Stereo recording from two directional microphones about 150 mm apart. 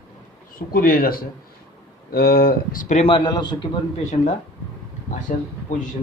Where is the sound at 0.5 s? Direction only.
75° left (ahead or behind).